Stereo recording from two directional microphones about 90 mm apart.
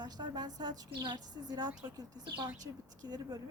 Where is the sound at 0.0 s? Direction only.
50° right (ahead or behind).